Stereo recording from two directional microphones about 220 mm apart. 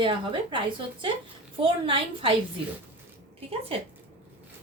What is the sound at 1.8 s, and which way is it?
Speech, 25° right (ahead or behind).